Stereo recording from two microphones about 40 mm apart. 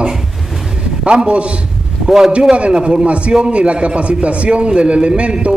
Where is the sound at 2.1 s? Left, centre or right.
Centre.